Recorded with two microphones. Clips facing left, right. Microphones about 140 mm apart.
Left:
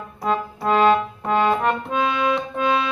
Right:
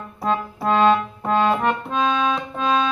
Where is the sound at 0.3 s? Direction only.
5° left (ahead or behind).